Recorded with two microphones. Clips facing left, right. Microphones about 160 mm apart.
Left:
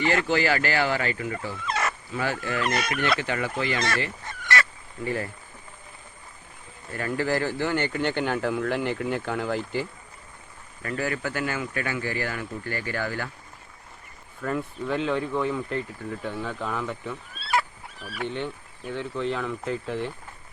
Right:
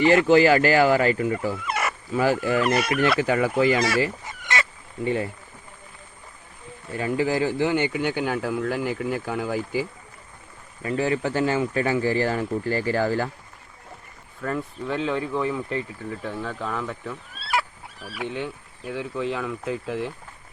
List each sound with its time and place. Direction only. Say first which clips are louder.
0.0 s speech: right 8 dB; 35° right (ahead or behind)
1.6 s fowl: right 1 dB; 10° right (ahead or behind)
2.3 s speech: right 4 dB; 10° right (ahead or behind)
4.3 s goose: left 1 dB; 20° right (ahead or behind)
5.0 s speech: right 4 dB; 20° right (ahead or behind)
6.9 s speech: right 3 dB; 15° right (ahead or behind)
10.8 s speech: right 5 dB; 25° right (ahead or behind)
14.4 s speech: even; centre (ahead or behind)